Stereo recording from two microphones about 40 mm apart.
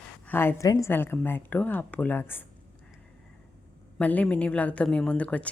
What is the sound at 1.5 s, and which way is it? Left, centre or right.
Speech, left.